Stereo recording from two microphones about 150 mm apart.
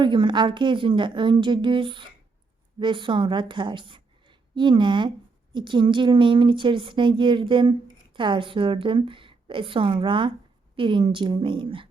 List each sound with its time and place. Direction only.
0.0 s a woman's voice: 30° right (ahead or behind)